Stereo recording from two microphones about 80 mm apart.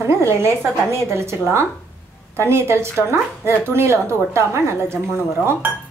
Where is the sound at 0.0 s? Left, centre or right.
Right.